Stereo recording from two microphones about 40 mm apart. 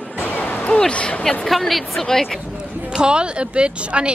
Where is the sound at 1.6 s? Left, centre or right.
Centre.